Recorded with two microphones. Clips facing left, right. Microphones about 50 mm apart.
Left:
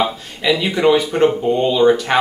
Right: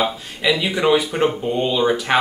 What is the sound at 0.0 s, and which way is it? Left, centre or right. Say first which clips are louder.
Speech: left 2 dB; centre.